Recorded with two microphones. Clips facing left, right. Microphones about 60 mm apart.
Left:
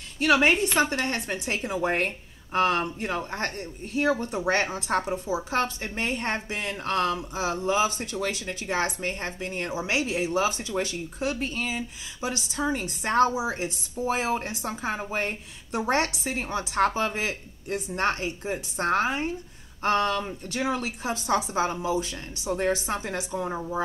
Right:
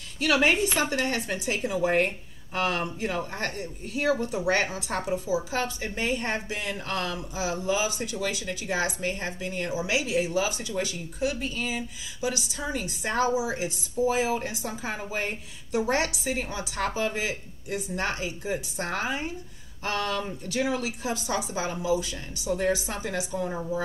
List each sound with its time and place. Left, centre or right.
0.2 s speech: left
15.1 s speech: left